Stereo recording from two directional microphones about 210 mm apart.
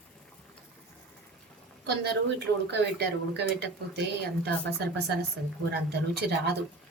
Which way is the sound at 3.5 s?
50° right (ahead or behind).